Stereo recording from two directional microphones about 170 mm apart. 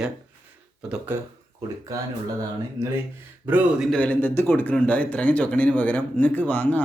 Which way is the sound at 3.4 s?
10° right (ahead or behind).